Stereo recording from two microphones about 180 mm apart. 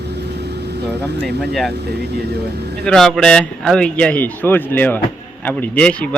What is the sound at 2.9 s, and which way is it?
A man's voice, centre (ahead or behind).